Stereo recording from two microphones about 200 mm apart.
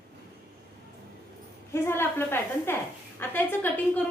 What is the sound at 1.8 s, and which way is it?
A woman's voice, 10° left (ahead or behind).